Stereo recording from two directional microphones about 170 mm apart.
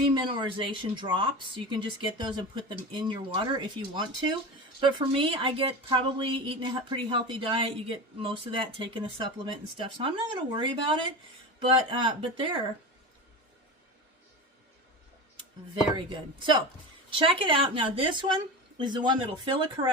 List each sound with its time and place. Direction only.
0.1 s a woman's voice: 25° right (ahead or behind)
15.4 s a woman's voice: 30° right (ahead or behind)